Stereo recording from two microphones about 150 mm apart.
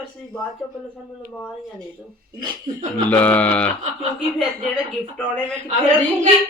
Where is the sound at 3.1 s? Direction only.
10° left (ahead or behind).